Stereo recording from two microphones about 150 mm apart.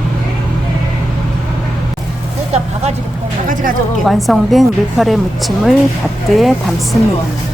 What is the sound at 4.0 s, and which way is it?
A woman's voice, centre (ahead or behind).